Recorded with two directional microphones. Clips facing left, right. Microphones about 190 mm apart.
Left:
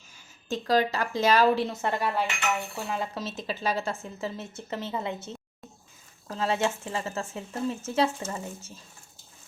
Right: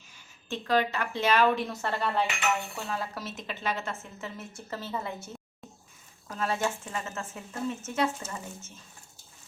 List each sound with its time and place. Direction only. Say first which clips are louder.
0.4 s a woman's voice: left 2 dB; 40° left (ahead or behind)
1.7 s a woman's voice: left 2 dB; 15° left (ahead or behind)